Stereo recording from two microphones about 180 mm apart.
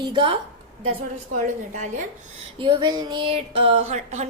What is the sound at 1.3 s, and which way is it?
Speech, 40° right (ahead or behind).